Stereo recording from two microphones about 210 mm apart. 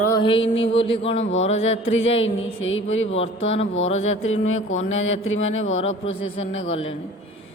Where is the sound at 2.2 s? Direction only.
65° left (ahead or behind).